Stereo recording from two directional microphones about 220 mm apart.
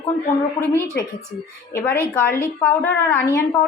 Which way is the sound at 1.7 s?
10° left (ahead or behind).